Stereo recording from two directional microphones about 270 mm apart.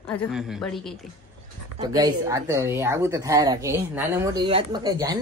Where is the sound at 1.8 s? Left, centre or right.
Centre.